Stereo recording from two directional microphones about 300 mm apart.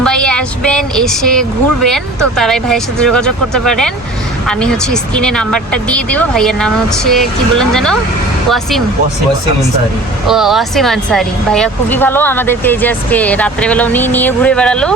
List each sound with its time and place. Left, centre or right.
0.0 s a sound: centre
1.9 s speech: centre
10.2 s speech: centre